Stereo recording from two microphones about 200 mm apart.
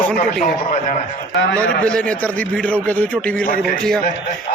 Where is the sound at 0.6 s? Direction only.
35° left (ahead or behind).